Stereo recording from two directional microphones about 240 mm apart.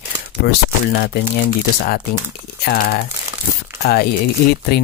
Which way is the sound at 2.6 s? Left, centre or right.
Left.